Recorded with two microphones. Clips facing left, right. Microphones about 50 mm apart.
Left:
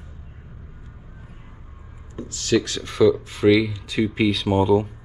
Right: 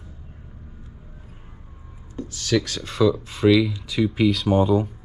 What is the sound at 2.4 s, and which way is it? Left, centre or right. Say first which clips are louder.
Speech: left 2 dB; left.